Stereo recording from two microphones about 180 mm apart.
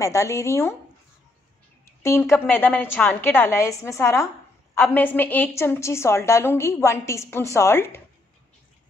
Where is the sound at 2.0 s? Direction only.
15° left (ahead or behind).